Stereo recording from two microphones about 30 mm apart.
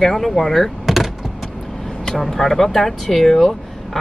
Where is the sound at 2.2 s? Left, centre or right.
Centre.